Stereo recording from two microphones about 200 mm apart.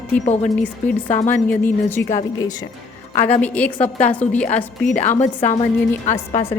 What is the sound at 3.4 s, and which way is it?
A woman's voice, 5° left (ahead or behind).